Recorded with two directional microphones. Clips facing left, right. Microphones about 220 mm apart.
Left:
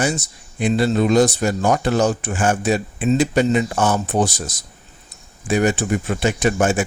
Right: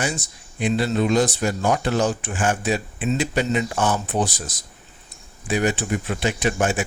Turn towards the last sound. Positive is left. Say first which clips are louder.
# left 4 dB
turn(degrees=45)  # may be behind; listen again after turning